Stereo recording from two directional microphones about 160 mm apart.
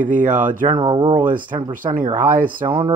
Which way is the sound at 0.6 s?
30° right (ahead or behind).